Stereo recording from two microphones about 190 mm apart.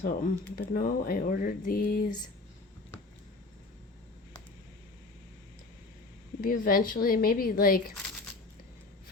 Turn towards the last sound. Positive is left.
turn(degrees=50)  # may be behind; listen again after turning